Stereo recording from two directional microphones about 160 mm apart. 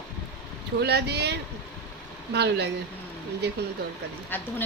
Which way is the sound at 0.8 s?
90° right.